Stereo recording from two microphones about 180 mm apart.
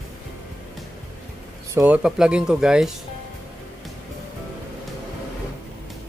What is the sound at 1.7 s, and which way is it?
Speech, 15° right (ahead or behind).